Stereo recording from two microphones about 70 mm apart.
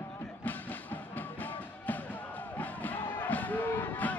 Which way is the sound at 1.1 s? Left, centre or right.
Left.